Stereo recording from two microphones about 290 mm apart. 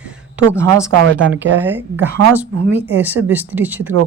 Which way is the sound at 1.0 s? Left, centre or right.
Right.